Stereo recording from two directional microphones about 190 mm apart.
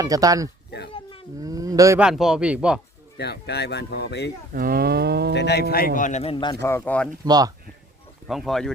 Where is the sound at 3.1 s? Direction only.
60° left (ahead or behind).